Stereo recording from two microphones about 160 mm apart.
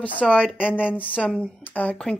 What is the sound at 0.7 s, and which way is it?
Speech, 5° right (ahead or behind).